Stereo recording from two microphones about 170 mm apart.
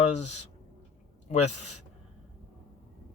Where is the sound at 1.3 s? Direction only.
40° left (ahead or behind).